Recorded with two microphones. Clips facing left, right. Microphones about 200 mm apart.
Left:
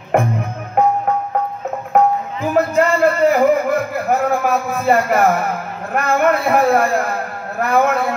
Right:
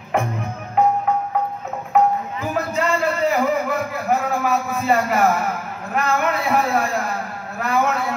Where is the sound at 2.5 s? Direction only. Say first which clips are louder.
Left 7 dB; 55° left (ahead or behind).